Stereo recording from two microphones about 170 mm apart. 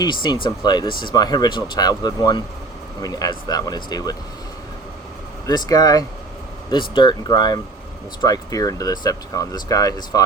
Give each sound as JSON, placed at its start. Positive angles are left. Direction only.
{"t": 0.0, "sound": "speech", "side_deg": 25}
{"t": 5.5, "sound": "speech", "side_deg": 20}